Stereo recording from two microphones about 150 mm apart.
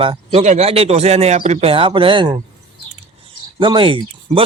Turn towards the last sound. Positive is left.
turn(degrees=-35)  # may be behind; listen again after turning